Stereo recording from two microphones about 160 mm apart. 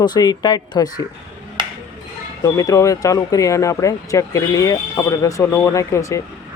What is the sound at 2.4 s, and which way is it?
Speech, 20° left (ahead or behind).